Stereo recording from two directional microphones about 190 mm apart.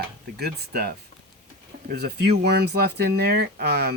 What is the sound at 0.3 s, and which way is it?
Speech, 55° right (ahead or behind).